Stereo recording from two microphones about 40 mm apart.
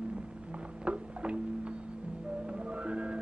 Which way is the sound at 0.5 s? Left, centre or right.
Right.